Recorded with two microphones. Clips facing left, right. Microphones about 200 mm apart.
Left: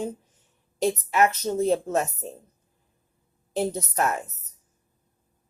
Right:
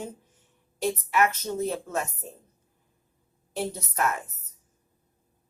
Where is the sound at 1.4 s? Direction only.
35° left (ahead or behind).